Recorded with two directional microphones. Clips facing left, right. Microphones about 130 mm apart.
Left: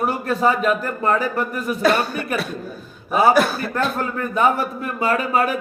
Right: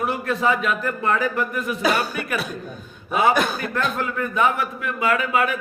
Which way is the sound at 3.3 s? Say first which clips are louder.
Left 4 dB; centre (ahead or behind).